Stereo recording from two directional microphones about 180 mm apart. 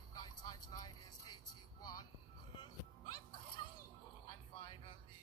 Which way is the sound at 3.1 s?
25° left (ahead or behind).